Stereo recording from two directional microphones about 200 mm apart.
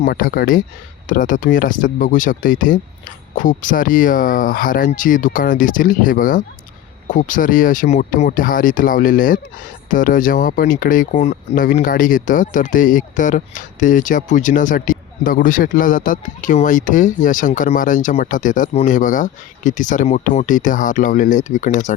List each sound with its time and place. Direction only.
0.0 s speech: 45° left (ahead or behind)